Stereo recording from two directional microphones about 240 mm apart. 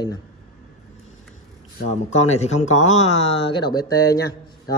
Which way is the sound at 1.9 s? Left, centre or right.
Left.